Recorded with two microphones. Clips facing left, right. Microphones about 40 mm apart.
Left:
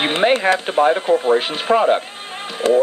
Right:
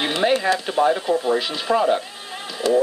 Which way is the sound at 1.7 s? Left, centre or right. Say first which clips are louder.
Left 4 dB; left.